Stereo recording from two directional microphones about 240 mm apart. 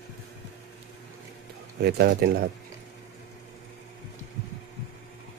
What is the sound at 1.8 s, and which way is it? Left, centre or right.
Speech, right.